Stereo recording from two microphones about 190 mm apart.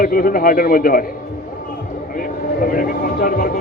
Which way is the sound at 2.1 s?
50° left (ahead or behind).